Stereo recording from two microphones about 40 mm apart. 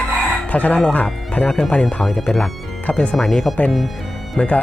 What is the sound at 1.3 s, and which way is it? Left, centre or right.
Speech, left.